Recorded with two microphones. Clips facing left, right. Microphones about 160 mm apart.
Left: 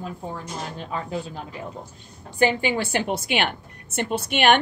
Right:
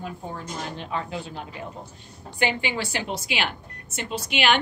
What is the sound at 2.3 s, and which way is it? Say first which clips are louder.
A woman's voice: left 5 dB; 45° left (ahead or behind).